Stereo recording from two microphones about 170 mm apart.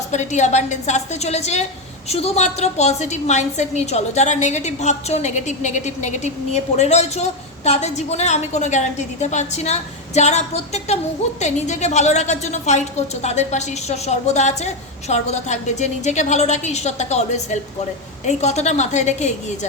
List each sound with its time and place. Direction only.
0.1 s a woman's voice: 45° left (ahead or behind)